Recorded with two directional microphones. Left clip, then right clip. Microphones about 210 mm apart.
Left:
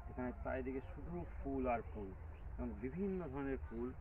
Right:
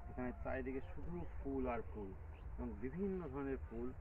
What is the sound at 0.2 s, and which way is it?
Speech, 5° left (ahead or behind).